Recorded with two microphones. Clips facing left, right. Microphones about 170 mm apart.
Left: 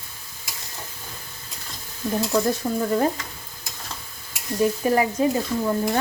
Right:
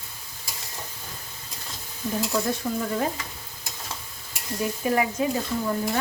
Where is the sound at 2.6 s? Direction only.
25° left (ahead or behind).